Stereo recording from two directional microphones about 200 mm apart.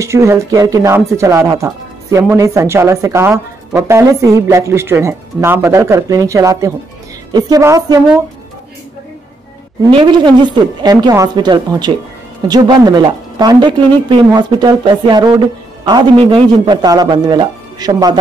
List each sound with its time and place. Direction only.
0.0 s a woman's voice: 15° right (ahead or behind)
9.9 s a woman's voice: 25° right (ahead or behind)